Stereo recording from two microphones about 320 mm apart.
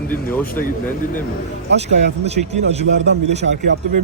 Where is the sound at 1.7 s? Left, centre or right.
Centre.